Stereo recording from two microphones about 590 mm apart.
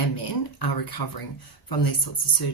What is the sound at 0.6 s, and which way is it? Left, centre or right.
Speech, left.